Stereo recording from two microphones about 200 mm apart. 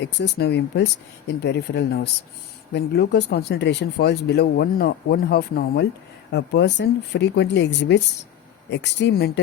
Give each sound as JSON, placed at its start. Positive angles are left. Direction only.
{"t": 0.0, "sound": "speech", "side_deg": 55}